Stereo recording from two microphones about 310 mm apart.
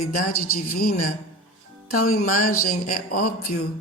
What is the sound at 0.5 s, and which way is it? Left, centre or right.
Speech, left.